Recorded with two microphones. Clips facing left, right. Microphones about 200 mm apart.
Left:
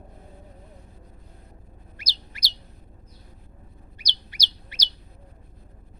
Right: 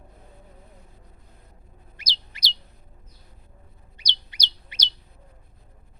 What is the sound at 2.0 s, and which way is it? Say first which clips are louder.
Bird: right 2 dB; 20° right (ahead or behind).